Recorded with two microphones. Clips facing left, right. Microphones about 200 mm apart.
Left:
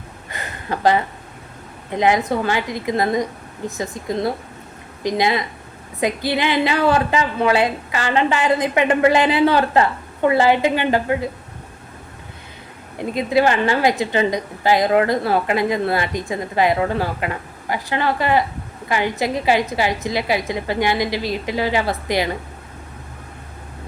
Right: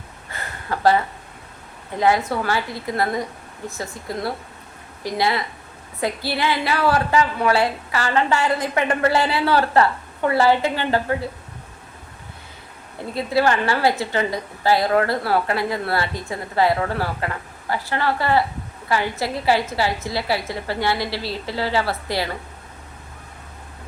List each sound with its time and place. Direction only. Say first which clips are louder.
0.3 s a sound: left 2 dB; 20° left (ahead or behind)
2.0 s a woman's voice: left 2 dB; 20° left (ahead or behind)
13.0 s a woman's voice: left 3 dB; 20° left (ahead or behind)